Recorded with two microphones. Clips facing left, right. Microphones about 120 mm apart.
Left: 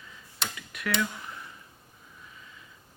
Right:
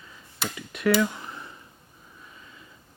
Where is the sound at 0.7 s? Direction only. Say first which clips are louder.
Right 9 dB; 30° right (ahead or behind).